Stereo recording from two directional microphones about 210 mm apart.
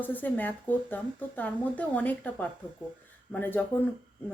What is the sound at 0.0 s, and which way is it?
Speech, 10° left (ahead or behind).